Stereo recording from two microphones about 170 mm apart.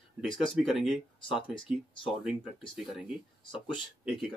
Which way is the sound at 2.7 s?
Centre (ahead or behind).